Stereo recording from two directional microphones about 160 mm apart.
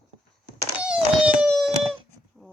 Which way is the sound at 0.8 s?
5° right (ahead or behind).